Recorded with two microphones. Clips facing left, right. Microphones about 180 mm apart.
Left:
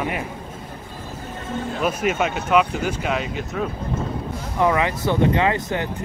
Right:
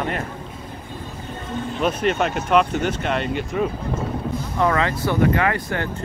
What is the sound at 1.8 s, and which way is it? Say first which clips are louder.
Speech: right 1 dB; 5° left (ahead or behind).